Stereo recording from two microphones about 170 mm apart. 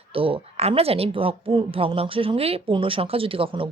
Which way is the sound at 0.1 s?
30° right (ahead or behind).